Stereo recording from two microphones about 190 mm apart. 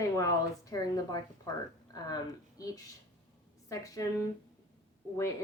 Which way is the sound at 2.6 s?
20° left (ahead or behind).